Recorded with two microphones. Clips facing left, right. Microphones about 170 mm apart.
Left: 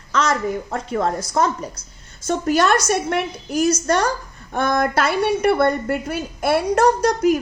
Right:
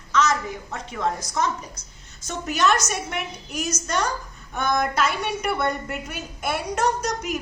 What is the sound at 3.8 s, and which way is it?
Speech, 60° left (ahead or behind).